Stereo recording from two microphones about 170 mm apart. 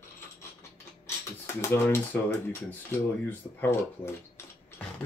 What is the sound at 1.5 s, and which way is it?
Speech, 15° left (ahead or behind).